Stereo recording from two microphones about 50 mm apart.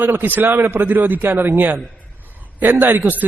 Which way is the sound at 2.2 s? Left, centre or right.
Right.